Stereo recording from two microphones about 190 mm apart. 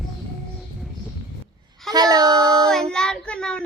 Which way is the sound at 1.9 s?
20° right (ahead or behind).